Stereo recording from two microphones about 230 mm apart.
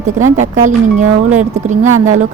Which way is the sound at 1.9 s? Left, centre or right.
Right.